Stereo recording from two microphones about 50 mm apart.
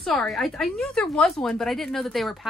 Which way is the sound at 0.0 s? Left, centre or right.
Centre.